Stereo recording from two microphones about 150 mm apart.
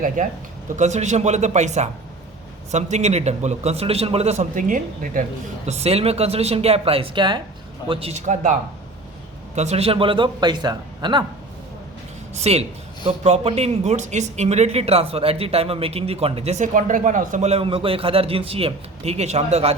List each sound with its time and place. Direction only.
0.8 s speech: 50° right (ahead or behind)
5.6 s a man's voice: 45° right (ahead or behind)
9.6 s a man's voice: 45° right (ahead or behind); by 11.3 s 30° right (ahead or behind)
12.3 s speech: 45° right (ahead or behind)